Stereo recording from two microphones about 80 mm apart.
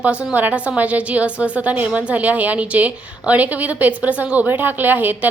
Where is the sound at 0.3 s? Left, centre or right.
Centre.